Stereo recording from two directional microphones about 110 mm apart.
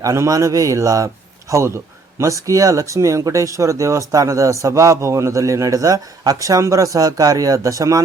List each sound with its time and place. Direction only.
0.0 s a man's voice: 30° right (ahead or behind)